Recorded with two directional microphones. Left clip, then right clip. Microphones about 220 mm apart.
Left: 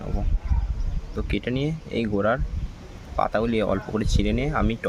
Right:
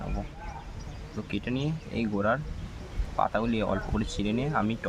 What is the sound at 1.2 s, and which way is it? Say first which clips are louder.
Speech: left 5 dB; 25° left (ahead or behind).